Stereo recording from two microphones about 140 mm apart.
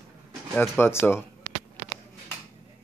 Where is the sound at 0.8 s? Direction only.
15° left (ahead or behind).